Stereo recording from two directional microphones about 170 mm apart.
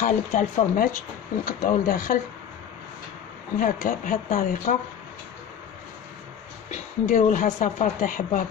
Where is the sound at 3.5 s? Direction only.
55° left (ahead or behind).